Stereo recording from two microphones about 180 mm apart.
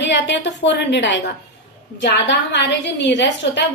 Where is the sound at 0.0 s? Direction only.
75° left (ahead or behind).